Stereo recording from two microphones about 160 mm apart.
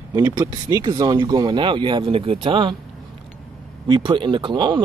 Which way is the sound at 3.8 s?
30° right (ahead or behind).